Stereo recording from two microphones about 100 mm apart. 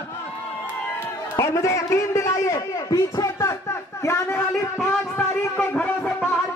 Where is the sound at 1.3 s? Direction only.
30° left (ahead or behind).